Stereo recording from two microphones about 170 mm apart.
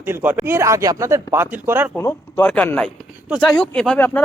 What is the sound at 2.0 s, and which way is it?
Speech, 15° left (ahead or behind).